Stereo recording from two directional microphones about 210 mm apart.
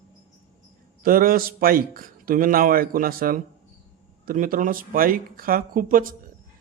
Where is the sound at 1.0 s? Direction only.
45° right (ahead or behind).